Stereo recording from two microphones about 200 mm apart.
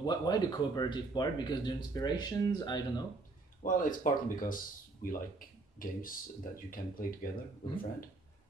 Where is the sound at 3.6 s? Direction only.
40° left (ahead or behind).